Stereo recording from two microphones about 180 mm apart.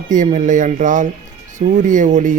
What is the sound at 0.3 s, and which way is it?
Speech, 45° right (ahead or behind).